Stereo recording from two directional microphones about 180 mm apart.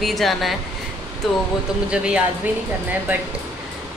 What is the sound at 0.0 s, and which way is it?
Speech, centre (ahead or behind).